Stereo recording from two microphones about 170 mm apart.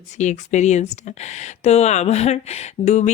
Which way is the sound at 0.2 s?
45° left (ahead or behind).